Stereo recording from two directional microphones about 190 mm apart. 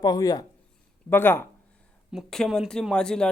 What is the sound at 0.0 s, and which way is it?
Speech, 20° left (ahead or behind).